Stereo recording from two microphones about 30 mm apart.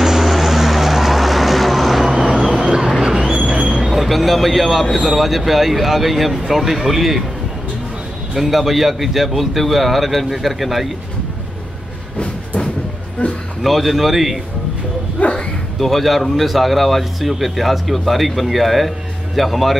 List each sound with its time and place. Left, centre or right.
0.0 s vehicle: centre
3.1 s a sound: centre
3.8 s a sound: centre
4.9 s speech: centre
8.4 s speech: centre
13.2 s a man's voice: left
13.6 s speech: centre
15.2 s speech: left
15.8 s speech: centre